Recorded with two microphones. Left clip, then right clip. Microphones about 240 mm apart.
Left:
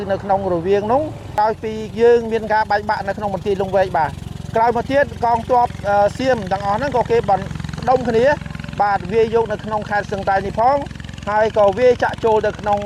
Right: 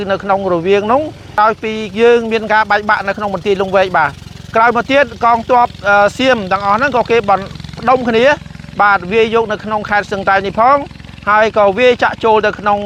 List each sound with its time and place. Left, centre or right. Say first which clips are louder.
0.0 s speech: right 4 dB; right